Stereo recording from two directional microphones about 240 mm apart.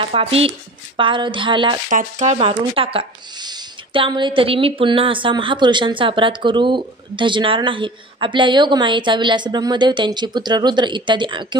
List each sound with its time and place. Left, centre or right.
0.0 s speech: right
1.9 s speech: right